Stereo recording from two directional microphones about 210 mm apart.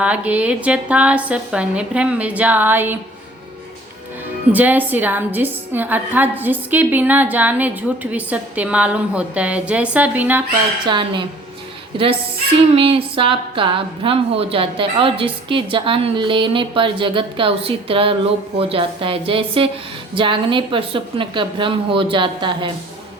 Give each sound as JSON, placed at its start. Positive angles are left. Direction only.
{"t": 0.0, "sound": "a woman's voice", "side_deg": -5}
{"t": 4.5, "sound": "a woman's voice", "side_deg": -10}
{"t": 10.8, "sound": "a woman's voice", "side_deg": -20}